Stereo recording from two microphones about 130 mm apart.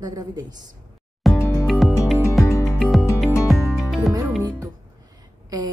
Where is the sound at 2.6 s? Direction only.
Centre (ahead or behind).